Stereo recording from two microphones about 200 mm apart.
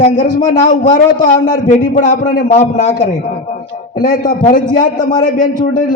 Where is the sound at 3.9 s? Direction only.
40° left (ahead or behind).